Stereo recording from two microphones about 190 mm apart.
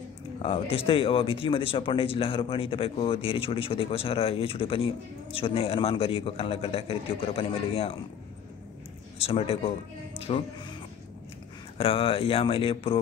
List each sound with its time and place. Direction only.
0.4 s speech: 30° left (ahead or behind)
9.2 s speech: 30° left (ahead or behind)
11.8 s speech: 30° left (ahead or behind)